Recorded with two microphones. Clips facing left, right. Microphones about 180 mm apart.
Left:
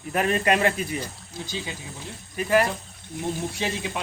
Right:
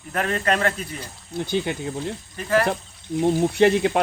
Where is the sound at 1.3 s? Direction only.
60° right (ahead or behind).